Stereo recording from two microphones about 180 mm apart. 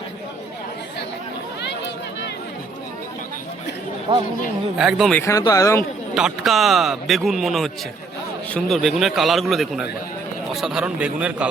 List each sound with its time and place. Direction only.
4.1 s speech: 30° right (ahead or behind)
4.8 s a man's voice: centre (ahead or behind)
5.2 s speech: 20° left (ahead or behind)
6.1 s a man's voice: centre (ahead or behind)